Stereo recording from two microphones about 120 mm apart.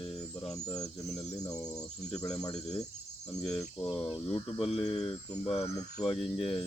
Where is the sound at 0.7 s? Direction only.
30° left (ahead or behind).